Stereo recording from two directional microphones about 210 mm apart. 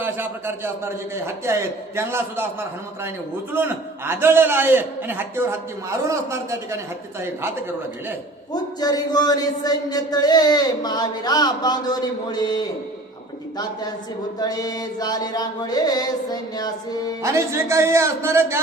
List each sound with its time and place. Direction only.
0.0 s a man's voice: 10° right (ahead or behind)
8.5 s speech: 20° left (ahead or behind)
14.3 s speech: 20° left (ahead or behind)
17.2 s a man's voice: 15° right (ahead or behind)